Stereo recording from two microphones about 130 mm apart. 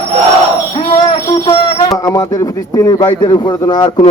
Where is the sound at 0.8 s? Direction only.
45° left (ahead or behind).